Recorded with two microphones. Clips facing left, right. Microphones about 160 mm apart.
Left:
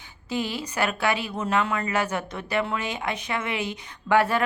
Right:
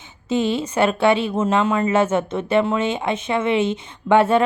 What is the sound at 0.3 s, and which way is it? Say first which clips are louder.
A woman's voice: right 9 dB; 25° right (ahead or behind).